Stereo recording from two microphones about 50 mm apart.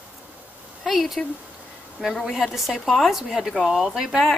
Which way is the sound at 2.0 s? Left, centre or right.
Centre.